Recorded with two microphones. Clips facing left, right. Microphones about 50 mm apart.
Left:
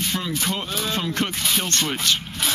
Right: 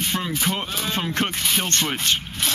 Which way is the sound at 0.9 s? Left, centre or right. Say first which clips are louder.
Right 1 dB; right.